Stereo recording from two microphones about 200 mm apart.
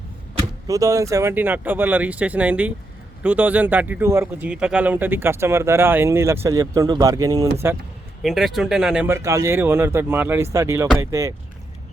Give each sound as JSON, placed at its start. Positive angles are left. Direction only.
{"t": 0.7, "sound": "speech", "side_deg": -15}
{"t": 8.2, "sound": "speech", "side_deg": 0}